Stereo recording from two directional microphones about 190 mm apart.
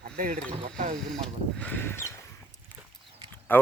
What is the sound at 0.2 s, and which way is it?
Speech, 50° right (ahead or behind).